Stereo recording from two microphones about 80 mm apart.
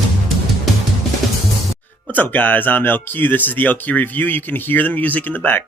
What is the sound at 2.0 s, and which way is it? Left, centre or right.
Speech, left.